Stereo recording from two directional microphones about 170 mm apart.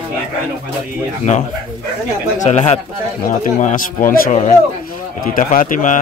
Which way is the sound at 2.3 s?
40° left (ahead or behind).